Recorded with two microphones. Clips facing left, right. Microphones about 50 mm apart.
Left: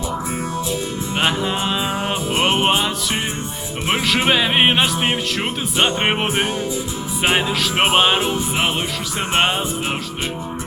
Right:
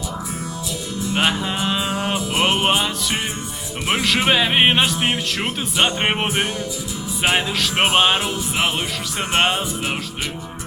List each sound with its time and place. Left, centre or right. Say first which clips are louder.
1.3 s music: left 1 dB; centre
2.1 s music: left 1 dB; left
2.6 s music: left 1 dB; centre
4.3 s music: even; centre
6.2 s music: left 1 dB; left
7.8 s music: left 1 dB; centre
9.3 s music: even; centre